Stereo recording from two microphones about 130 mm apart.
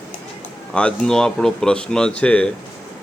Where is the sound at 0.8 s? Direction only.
5° left (ahead or behind).